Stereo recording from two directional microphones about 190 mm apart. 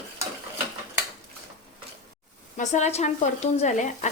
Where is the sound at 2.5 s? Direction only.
40° left (ahead or behind).